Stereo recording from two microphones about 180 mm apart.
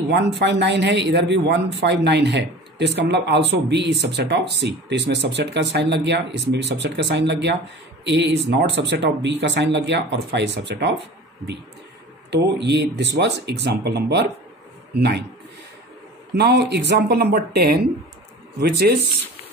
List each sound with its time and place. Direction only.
0.1 s speech: 70° right (ahead or behind)
8.0 s speech: 85° right
12.3 s speech: 70° right (ahead or behind)
16.3 s speech: 65° right (ahead or behind)